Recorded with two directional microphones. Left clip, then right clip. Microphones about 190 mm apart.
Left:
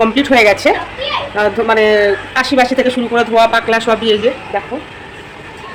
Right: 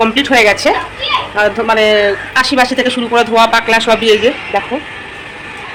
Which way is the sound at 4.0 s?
15° right (ahead or behind).